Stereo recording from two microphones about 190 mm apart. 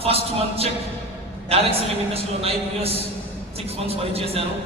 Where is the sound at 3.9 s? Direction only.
30° right (ahead or behind).